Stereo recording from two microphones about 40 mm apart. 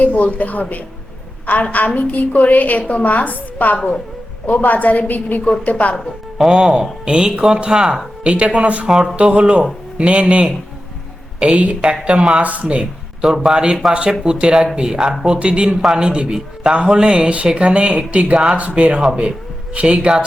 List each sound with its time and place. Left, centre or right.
0.0 s a woman's voice: left
6.5 s speech: right
8.9 s a man's voice: centre
9.1 s speech: right
13.2 s a man's voice: centre
15.3 s speech: right